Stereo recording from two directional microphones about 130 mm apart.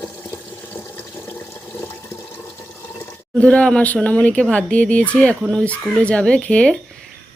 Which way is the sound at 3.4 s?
10° left (ahead or behind).